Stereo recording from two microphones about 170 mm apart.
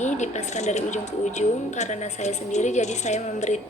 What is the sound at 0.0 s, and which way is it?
A woman's voice, 45° left (ahead or behind).